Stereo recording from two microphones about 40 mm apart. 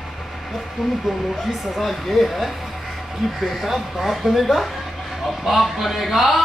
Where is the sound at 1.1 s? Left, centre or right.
Centre.